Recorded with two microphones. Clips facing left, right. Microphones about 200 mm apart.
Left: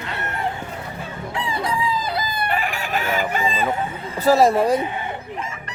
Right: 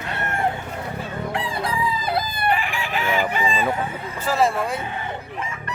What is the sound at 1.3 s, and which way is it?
Chicken, 55° right (ahead or behind).